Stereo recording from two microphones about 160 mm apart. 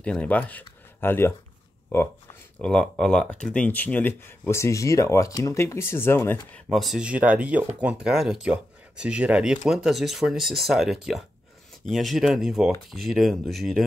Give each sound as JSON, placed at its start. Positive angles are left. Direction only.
{"t": 0.0, "sound": "speech", "side_deg": 5}
{"t": 2.6, "sound": "speech", "side_deg": 5}
{"t": 6.5, "sound": "speech", "side_deg": 0}